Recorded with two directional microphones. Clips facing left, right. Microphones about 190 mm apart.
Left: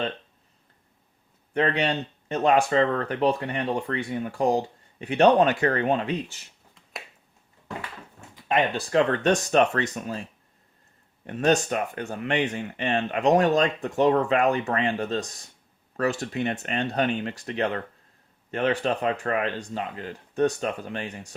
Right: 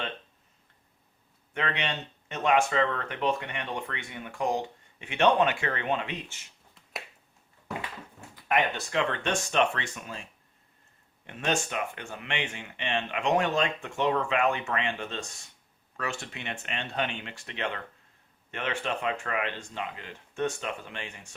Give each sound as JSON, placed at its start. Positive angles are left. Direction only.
{"t": 1.5, "sound": "speech", "side_deg": 35}
{"t": 8.4, "sound": "speech", "side_deg": 25}
{"t": 8.9, "sound": "speech", "side_deg": 40}
{"t": 11.3, "sound": "speech", "side_deg": 40}